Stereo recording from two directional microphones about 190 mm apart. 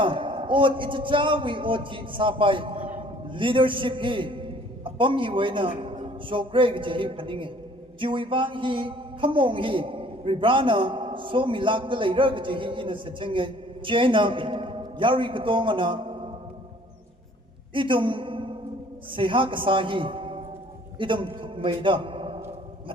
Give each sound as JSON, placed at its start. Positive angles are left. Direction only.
{"t": 0.0, "sound": "a man's voice", "side_deg": -25}
{"t": 17.7, "sound": "a man's voice", "side_deg": -25}